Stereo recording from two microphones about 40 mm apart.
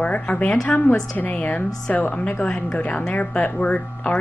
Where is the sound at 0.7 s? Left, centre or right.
Left.